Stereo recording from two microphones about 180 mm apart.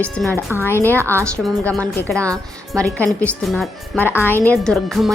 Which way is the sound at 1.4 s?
5° left (ahead or behind).